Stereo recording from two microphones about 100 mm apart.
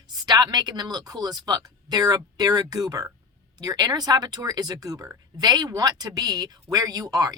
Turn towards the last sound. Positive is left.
turn(degrees=-40)  # may be behind; listen again after turning